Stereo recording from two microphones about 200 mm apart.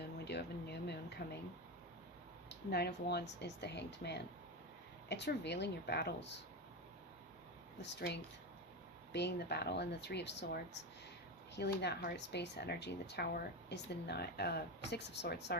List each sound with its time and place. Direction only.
0.3 s a sound: 55° left (ahead or behind)
2.5 s speech: 55° left (ahead or behind)
7.8 s speech: 55° left (ahead or behind)